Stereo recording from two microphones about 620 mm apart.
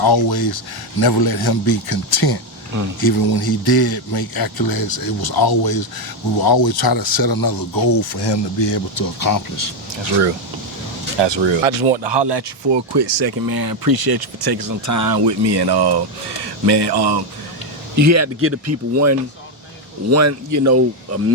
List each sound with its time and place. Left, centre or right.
0.0 s speech: left
11.2 s speech: right
17.9 s speech: right